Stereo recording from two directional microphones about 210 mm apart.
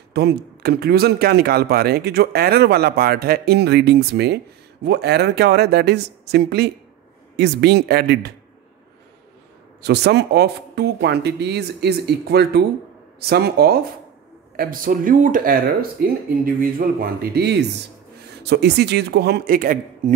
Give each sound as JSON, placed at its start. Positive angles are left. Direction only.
{"t": 0.1, "sound": "speech", "side_deg": -50}
{"t": 9.8, "sound": "speech", "side_deg": -50}